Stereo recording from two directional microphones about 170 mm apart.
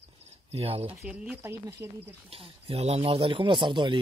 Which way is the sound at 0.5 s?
35° right (ahead or behind).